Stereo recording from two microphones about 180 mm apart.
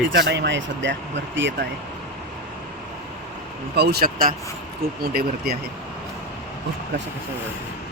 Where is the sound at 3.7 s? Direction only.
65° right (ahead or behind).